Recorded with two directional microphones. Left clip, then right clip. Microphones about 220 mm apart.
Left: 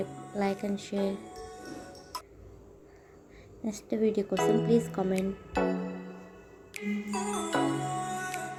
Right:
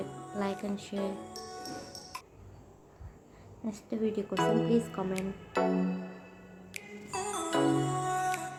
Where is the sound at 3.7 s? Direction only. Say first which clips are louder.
Left 5 dB; 15° left (ahead or behind).